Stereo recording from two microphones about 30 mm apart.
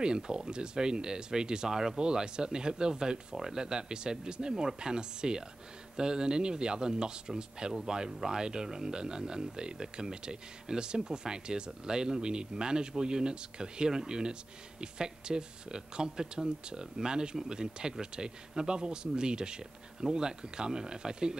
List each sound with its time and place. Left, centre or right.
0.0 s speech: right